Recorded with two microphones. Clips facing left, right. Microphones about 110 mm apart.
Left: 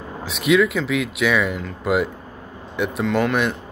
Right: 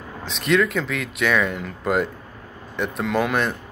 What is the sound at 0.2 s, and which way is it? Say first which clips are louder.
Speech: left 3 dB; 5° left (ahead or behind).